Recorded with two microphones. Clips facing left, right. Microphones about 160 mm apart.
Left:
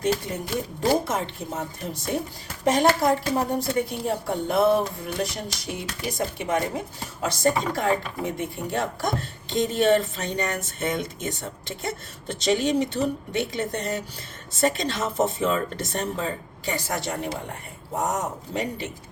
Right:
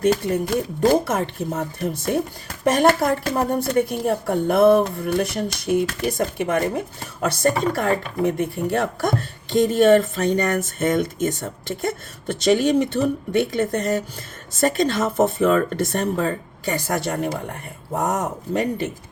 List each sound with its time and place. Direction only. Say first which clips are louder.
0.0 s speech: right 6 dB; 55° right (ahead or behind)